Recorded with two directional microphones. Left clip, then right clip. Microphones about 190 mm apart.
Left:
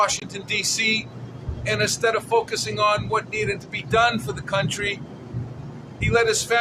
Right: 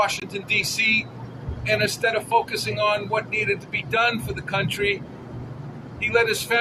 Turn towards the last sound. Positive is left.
turn(degrees=15)  # may be behind; listen again after turning